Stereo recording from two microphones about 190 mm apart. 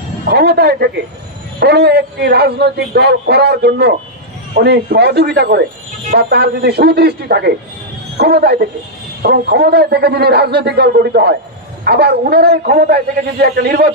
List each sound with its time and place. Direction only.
0.3 s a man's voice: 60° right (ahead or behind)